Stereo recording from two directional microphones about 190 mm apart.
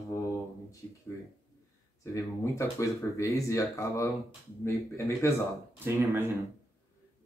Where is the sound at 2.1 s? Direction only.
15° left (ahead or behind).